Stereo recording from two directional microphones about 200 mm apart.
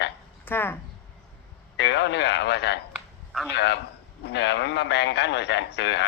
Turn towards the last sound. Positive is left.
turn(degrees=60)  # may be behind; listen again after turning